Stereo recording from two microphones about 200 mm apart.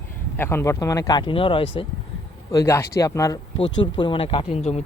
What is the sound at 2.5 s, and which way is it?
Speech, 15° left (ahead or behind).